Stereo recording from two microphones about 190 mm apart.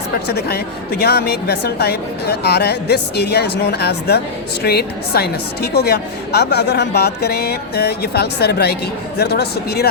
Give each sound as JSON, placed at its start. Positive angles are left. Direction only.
{"t": 0.3, "sound": "a woman's voice", "side_deg": 55}